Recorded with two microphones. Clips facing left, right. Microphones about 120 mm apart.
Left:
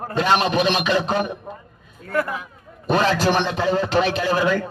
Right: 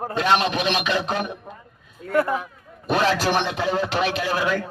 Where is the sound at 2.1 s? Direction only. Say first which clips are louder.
Right 3 dB; 25° right (ahead or behind).